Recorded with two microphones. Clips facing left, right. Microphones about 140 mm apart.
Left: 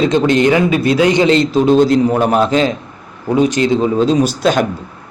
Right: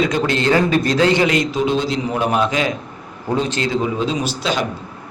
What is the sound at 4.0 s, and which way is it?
Speech, 40° left (ahead or behind).